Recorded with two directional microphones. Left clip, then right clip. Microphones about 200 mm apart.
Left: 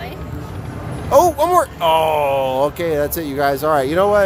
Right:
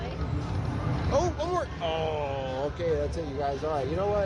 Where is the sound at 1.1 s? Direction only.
45° left (ahead or behind).